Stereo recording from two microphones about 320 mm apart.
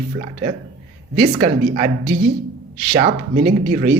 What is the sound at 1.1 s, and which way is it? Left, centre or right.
A woman's voice, right.